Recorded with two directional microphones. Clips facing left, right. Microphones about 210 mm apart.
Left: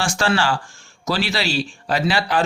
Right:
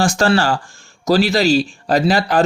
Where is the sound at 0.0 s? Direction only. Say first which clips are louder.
Right 5 dB; 40° right (ahead or behind).